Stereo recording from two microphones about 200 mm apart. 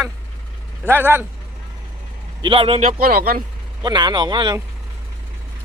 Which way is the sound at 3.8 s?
20° right (ahead or behind).